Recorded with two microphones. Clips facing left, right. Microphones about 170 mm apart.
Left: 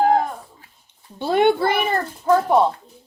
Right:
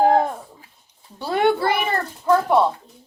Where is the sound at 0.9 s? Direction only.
25° left (ahead or behind).